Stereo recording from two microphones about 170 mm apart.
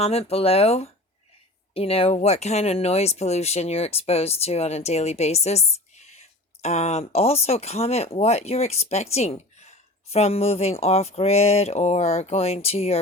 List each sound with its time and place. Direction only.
0.0 s speech: 35° left (ahead or behind)